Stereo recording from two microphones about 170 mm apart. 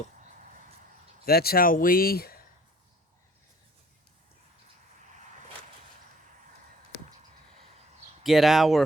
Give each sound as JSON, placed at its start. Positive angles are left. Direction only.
{"t": 1.2, "sound": "speech", "side_deg": 65}
{"t": 8.2, "sound": "speech", "side_deg": 0}